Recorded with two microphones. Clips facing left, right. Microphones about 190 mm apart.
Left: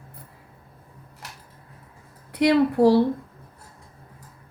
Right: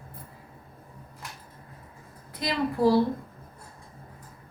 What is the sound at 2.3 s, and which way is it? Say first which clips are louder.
Speech: left 10 dB; 70° left (ahead or behind).